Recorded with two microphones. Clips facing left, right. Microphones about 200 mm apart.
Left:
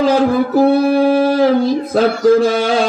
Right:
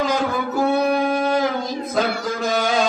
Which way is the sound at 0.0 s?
30° left (ahead or behind).